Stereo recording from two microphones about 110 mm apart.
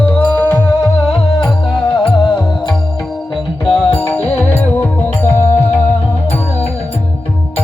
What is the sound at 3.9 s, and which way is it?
Music, 15° left (ahead or behind).